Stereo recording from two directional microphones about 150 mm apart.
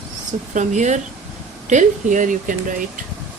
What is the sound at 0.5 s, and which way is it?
A woman's voice, 55° right (ahead or behind).